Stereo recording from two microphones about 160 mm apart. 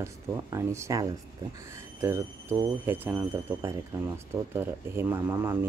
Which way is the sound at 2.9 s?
10° right (ahead or behind).